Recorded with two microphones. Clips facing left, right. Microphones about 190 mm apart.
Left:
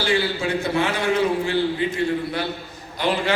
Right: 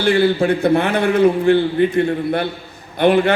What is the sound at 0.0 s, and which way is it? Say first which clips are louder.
A man's voice: right 8 dB; 55° right (ahead or behind).